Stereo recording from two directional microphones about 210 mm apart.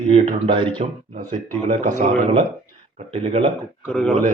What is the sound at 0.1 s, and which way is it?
Speech, 25° right (ahead or behind).